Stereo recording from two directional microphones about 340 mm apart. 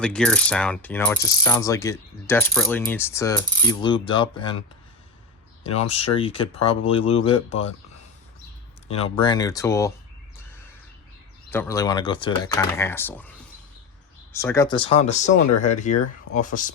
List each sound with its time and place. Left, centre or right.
0.0 s mechanisms: centre
5.8 s mechanisms: centre
8.9 s mechanisms: centre
11.5 s mechanisms: centre
14.3 s mechanisms: centre
15.0 s speech: left